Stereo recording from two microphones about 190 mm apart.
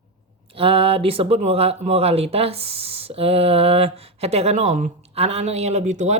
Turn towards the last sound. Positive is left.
turn(degrees=-35)  # may be behind; listen again after turning